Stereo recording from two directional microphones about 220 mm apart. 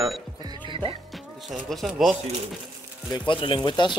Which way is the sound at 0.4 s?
20° right (ahead or behind).